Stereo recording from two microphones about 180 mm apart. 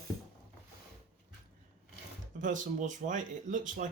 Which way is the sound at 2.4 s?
45° right (ahead or behind).